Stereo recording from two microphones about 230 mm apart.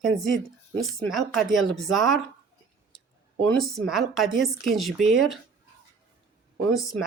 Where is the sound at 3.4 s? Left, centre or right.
Centre.